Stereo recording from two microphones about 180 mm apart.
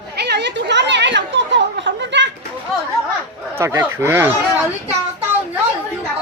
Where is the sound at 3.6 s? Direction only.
15° right (ahead or behind).